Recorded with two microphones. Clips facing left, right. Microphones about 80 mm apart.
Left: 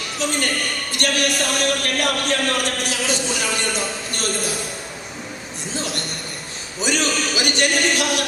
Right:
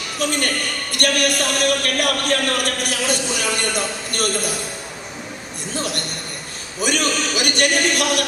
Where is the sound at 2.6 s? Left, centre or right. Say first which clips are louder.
Right 1 dB; right.